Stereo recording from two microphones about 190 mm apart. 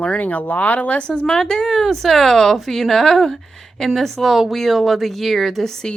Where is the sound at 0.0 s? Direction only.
5° left (ahead or behind).